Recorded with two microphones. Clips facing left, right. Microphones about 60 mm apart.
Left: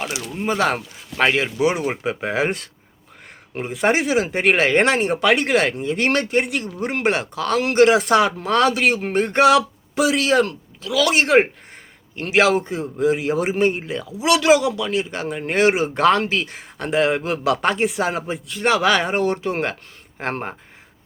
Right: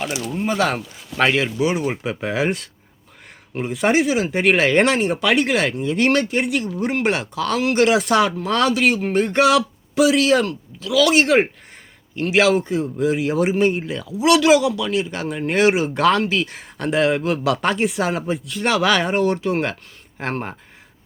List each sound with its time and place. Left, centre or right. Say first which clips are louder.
0.4 s speech: left 1 dB; left
1.5 s speech: left 1 dB; left
2.0 s speech: left 2 dB; left
3.5 s speech: right 1 dB; left
4.0 s speech: even; left; by 14.5 s centre
14.5 s speech: right 1 dB; left